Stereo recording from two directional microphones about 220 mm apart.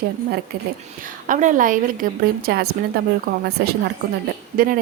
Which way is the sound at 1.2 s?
35° right (ahead or behind).